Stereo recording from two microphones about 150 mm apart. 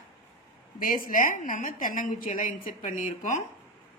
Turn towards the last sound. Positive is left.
turn(degrees=55)  # may be behind; listen again after turning